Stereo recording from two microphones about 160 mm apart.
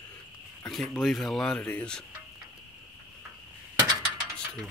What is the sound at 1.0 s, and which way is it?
Speech, centre (ahead or behind).